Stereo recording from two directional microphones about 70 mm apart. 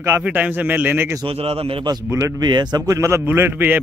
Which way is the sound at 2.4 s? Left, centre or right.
Right.